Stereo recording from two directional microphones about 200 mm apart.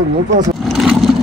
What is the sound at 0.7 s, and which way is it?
Vehicle, centre (ahead or behind).